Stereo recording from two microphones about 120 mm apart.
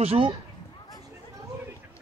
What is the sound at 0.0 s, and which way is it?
Speech, 55° right (ahead or behind).